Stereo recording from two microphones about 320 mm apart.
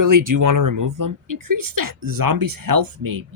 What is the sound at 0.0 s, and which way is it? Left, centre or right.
Speech, right.